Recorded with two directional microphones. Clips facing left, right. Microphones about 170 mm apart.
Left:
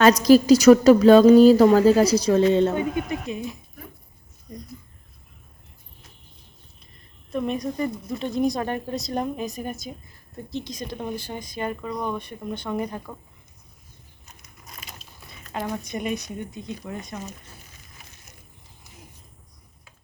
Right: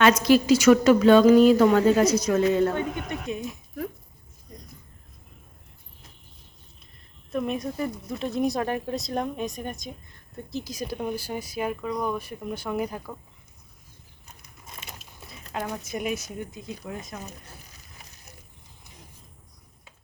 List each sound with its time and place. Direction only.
0.0 s a woman's voice: 40° left (ahead or behind)
2.7 s speech: 5° left (ahead or behind)
7.3 s speech: centre (ahead or behind)
14.6 s a sound: 25° right (ahead or behind)
15.3 s speech: centre (ahead or behind)